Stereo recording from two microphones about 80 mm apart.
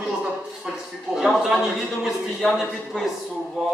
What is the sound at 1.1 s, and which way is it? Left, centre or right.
A man's voice, centre.